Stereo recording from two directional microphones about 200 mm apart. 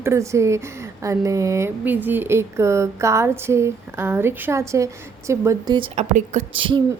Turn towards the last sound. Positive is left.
turn(degrees=-25)  # may be behind; listen again after turning